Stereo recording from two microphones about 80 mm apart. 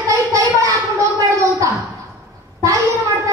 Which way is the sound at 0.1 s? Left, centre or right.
Right.